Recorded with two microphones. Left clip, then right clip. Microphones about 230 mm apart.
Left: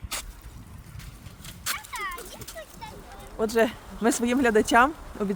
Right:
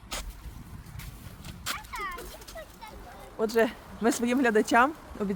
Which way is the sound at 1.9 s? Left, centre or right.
Left.